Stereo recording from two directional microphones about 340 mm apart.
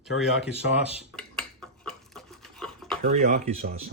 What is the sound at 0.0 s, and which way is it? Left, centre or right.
Speech, centre.